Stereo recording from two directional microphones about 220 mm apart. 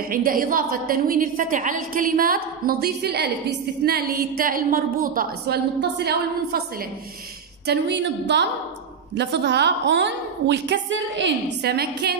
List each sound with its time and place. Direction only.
0.1 s a woman's voice: 40° right (ahead or behind)
7.6 s a woman's voice: 50° right (ahead or behind)